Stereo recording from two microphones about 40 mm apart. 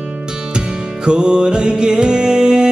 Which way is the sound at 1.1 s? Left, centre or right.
Right.